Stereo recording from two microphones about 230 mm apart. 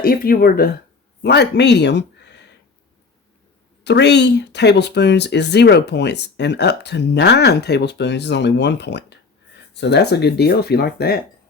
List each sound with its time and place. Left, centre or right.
0.0 s speech: left
3.8 s speech: left